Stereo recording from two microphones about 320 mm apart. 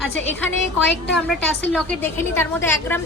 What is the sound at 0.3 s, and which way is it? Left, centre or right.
A woman's voice, centre.